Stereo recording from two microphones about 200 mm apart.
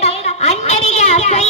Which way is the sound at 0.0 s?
35° left (ahead or behind).